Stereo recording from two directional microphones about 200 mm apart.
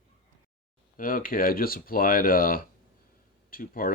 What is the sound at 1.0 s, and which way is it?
Speech, 45° left (ahead or behind).